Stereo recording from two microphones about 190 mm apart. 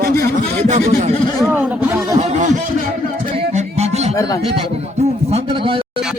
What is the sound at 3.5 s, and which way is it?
Music, 35° right (ahead or behind).